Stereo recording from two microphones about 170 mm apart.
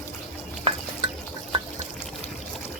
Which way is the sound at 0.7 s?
30° right (ahead or behind).